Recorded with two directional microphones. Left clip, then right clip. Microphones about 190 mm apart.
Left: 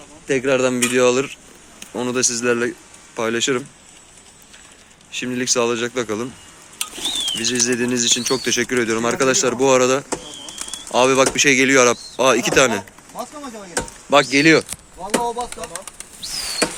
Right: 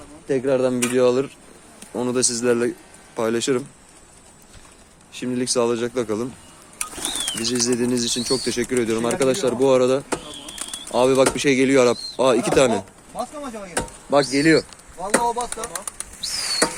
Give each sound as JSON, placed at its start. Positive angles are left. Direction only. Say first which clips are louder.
{"t": 0.3, "sound": "speech", "louder": "left 2 dB", "side_deg": 10}
{"t": 5.1, "sound": "speech", "louder": "left 2 dB", "side_deg": -5}
{"t": 14.2, "sound": "speech", "louder": "left 3 dB", "side_deg": 15}
{"t": 15.2, "sound": "speech", "louder": "right 1 dB", "side_deg": -10}